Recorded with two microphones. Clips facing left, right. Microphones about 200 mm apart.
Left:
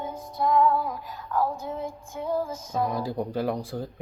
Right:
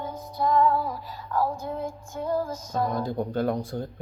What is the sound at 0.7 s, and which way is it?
Female singing, 10° right (ahead or behind).